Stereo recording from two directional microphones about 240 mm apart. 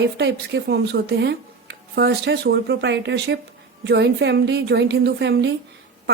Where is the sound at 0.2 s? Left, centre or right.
Right.